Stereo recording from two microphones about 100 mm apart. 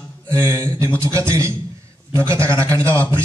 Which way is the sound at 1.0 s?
30° right (ahead or behind).